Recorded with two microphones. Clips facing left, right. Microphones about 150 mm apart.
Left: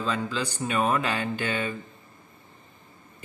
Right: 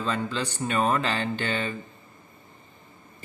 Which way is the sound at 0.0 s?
Centre (ahead or behind).